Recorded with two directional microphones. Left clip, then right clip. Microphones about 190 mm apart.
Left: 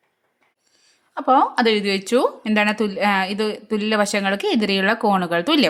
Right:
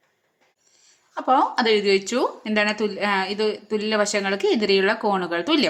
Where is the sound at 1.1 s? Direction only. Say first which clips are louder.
Left 3 dB; 25° left (ahead or behind).